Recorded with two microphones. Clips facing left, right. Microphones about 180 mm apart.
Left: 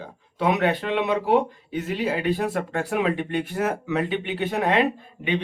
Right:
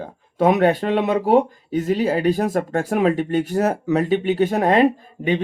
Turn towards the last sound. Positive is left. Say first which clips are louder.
# right 5 dB
turn(degrees=-40)  # may be behind; listen again after turning